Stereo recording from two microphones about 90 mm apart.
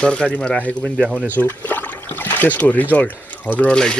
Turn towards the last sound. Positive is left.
turn(degrees=10)  # may be behind; listen again after turning